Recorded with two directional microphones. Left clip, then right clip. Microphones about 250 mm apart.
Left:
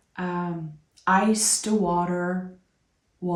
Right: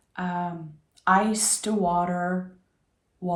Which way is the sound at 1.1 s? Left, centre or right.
Centre.